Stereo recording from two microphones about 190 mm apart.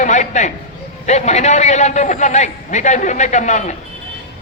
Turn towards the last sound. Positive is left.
turn(degrees=40)  # may be behind; listen again after turning